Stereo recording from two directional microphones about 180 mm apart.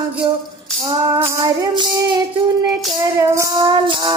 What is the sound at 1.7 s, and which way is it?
Music, 25° right (ahead or behind).